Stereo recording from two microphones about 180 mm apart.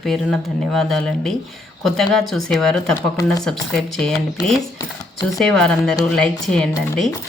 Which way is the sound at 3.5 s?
5° left (ahead or behind).